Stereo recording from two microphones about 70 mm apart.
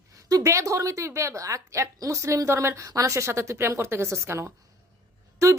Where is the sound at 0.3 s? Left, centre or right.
Right.